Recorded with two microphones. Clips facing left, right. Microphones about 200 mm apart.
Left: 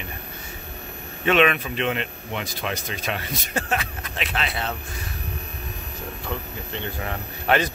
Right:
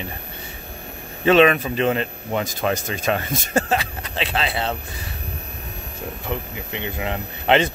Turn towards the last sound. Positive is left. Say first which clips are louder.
# right 4 dB
turn(degrees=-25)  # may be behind; listen again after turning